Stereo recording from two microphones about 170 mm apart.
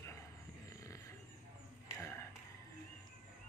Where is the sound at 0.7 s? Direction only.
20° left (ahead or behind).